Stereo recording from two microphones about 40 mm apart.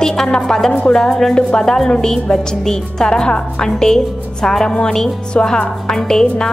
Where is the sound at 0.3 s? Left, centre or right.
Centre.